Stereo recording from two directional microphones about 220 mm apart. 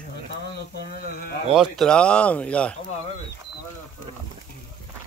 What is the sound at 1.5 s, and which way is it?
Speech, centre (ahead or behind).